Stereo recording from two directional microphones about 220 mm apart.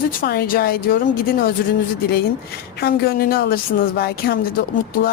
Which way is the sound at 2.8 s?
45° left (ahead or behind).